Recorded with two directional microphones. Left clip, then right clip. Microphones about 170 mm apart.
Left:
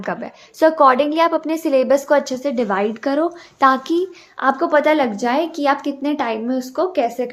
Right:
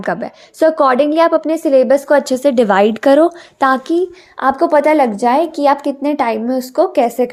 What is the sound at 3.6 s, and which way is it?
Speech, 25° right (ahead or behind).